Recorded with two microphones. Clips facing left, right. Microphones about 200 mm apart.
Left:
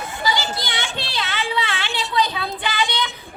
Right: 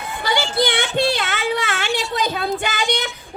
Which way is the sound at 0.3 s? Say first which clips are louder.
Right 6 dB; 60° right (ahead or behind).